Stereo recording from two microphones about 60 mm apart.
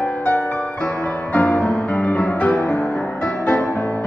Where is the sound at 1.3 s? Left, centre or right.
Left.